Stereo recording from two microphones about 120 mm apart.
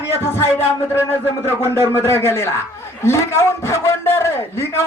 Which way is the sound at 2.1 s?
20° left (ahead or behind).